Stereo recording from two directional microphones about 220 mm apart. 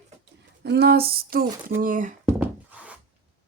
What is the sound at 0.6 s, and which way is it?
Speech, 45° right (ahead or behind).